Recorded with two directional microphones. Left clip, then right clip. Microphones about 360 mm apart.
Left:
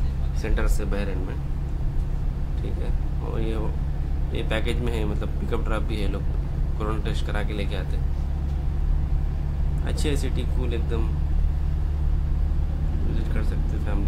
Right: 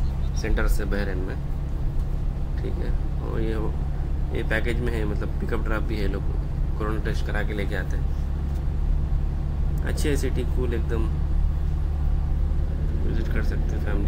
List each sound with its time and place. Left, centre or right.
0.4 s speech: centre
4.5 s speech: centre
6.8 s speech: centre
9.8 s speech: centre